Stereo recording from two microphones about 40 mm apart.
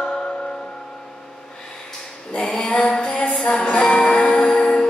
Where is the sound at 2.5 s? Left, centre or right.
Left.